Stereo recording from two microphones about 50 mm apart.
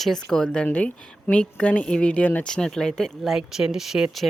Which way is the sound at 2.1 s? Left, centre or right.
Left.